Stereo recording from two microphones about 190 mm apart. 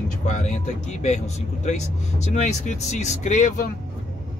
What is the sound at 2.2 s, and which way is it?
Speech, 40° left (ahead or behind).